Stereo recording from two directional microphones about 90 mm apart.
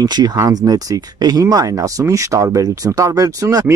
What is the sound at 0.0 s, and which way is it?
Speech, 50° right (ahead or behind).